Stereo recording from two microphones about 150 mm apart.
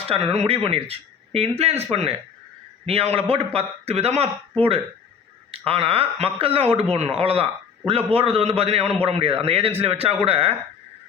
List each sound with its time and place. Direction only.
0.1 s a man's voice: 40° right (ahead or behind)
5.5 s a man's voice: 40° right (ahead or behind)